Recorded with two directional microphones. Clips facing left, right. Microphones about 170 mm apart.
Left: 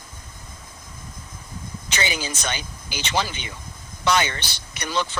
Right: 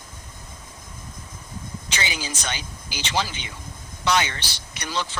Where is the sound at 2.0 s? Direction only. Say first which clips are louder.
Left 4 dB; 50° left (ahead or behind).